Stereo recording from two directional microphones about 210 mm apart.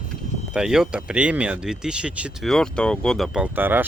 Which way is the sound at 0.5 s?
5° right (ahead or behind).